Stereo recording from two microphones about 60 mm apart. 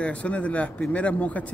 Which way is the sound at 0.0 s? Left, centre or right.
Left.